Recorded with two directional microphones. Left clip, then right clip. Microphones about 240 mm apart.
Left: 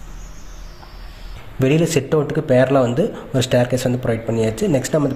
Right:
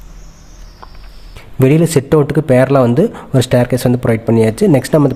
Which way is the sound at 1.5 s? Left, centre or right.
Right.